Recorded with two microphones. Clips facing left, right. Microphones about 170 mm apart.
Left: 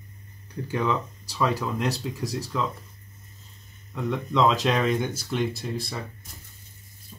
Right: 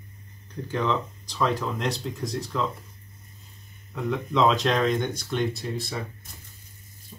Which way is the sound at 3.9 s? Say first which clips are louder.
Even; centre (ahead or behind).